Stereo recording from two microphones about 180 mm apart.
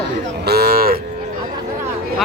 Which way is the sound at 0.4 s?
60° right (ahead or behind).